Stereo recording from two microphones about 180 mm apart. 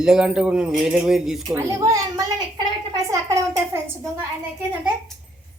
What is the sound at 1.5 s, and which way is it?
Speech, 15° right (ahead or behind).